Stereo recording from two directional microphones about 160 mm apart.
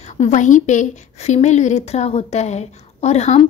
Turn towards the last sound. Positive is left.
turn(degrees=45)  # may be behind; listen again after turning